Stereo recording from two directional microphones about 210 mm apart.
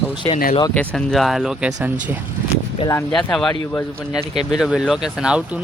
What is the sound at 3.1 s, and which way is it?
Speech, centre (ahead or behind).